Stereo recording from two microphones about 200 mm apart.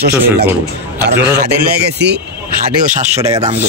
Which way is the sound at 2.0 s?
60° right (ahead or behind).